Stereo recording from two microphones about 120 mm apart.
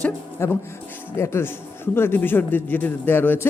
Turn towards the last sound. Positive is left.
turn(degrees=15)  # may be behind; listen again after turning